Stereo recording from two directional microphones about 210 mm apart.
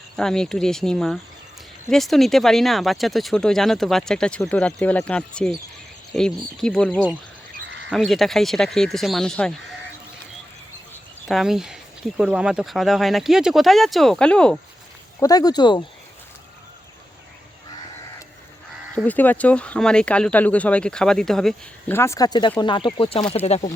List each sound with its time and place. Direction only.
0.2 s speech: 5° left (ahead or behind)
10.9 s speech: centre (ahead or behind)
15.2 s speech: 20° left (ahead or behind)
18.9 s speech: 10° left (ahead or behind); by 23.6 s 30° left (ahead or behind)